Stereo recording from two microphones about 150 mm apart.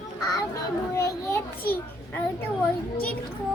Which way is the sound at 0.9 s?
20° left (ahead or behind).